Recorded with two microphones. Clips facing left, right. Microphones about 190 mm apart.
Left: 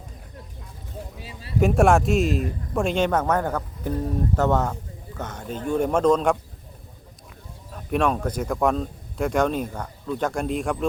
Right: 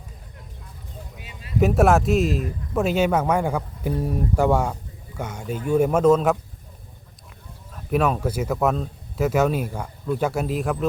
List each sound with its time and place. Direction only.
1.2 s a sound: 35° left (ahead or behind)
1.5 s speech: centre (ahead or behind)
7.7 s speech: 5° right (ahead or behind)